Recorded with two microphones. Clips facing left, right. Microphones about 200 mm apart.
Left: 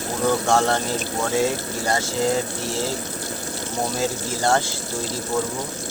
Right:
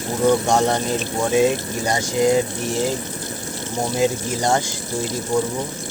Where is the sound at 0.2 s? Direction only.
20° right (ahead or behind).